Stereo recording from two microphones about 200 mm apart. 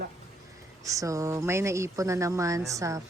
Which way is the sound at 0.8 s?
15° right (ahead or behind).